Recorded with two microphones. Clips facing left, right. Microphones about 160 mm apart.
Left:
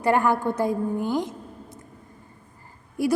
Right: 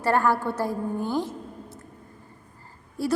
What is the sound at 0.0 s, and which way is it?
A woman's voice, 15° left (ahead or behind).